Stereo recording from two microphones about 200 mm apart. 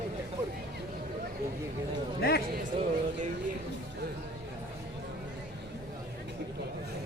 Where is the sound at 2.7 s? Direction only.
25° right (ahead or behind).